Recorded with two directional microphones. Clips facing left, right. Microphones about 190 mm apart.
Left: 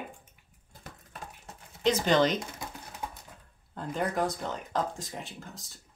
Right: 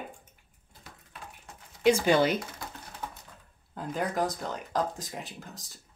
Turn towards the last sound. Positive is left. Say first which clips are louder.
# even
turn(degrees=0)  # may be behind; listen again after turning